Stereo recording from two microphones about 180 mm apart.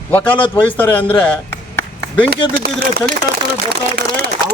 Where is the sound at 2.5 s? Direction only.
60° right (ahead or behind).